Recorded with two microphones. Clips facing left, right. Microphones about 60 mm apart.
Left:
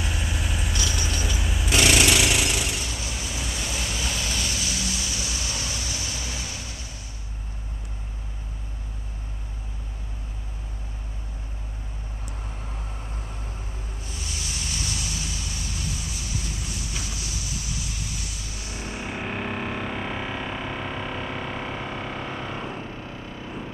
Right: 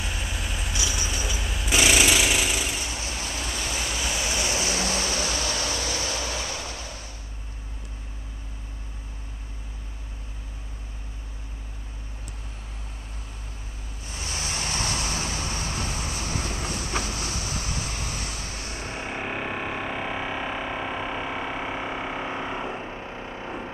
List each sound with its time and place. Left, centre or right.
0.0 s vehicle: centre
0.7 s vehicle: centre
1.4 s jackhammer: centre
2.9 s vehicle: right
3.3 s waves: centre; by 6.8 s right
14.2 s vehicle: right
19.1 s music: centre; by 23.7 s right